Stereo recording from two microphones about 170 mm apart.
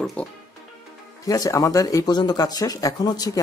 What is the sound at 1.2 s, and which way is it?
Speech, 20° left (ahead or behind).